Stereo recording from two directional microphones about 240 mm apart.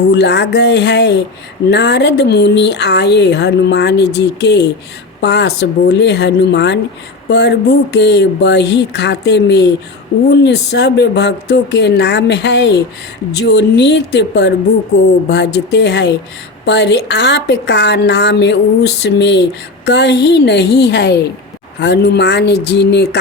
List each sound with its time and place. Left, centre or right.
0.1 s speech: left